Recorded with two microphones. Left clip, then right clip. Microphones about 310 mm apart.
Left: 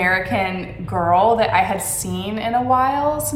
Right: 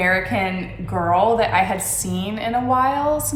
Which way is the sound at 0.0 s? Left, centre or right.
Centre.